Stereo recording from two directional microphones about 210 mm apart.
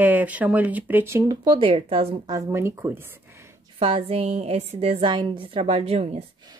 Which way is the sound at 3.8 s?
25° right (ahead or behind).